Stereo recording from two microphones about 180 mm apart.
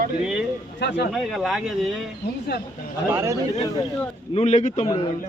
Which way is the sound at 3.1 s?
15° right (ahead or behind).